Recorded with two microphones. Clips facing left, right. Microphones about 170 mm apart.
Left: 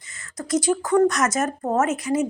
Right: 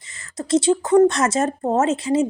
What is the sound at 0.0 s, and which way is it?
Speech, 25° right (ahead or behind).